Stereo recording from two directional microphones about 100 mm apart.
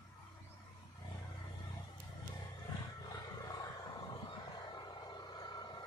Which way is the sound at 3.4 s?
40° left (ahead or behind).